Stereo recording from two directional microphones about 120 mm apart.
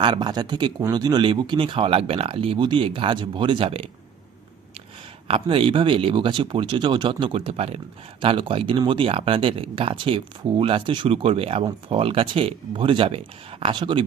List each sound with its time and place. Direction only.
0.0 s speech: 40° right (ahead or behind)
5.3 s speech: 50° right (ahead or behind)
8.2 s speech: 45° right (ahead or behind)